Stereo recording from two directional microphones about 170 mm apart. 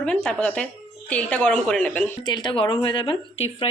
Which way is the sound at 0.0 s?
5° left (ahead or behind).